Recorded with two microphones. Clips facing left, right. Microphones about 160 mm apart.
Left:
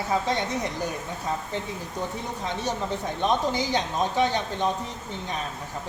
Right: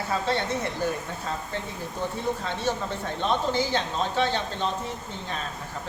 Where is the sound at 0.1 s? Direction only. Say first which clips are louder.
Left 1 dB; 15° left (ahead or behind).